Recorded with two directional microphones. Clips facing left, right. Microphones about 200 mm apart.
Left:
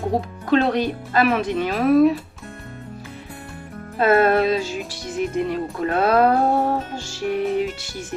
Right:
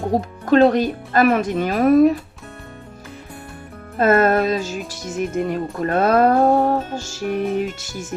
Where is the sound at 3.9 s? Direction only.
45° right (ahead or behind).